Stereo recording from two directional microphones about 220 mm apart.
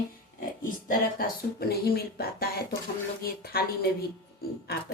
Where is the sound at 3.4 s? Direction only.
45° left (ahead or behind).